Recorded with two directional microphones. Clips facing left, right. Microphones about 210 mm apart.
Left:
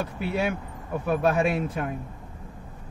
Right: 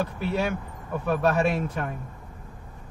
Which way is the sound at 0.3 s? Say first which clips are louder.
Even; 5° left (ahead or behind).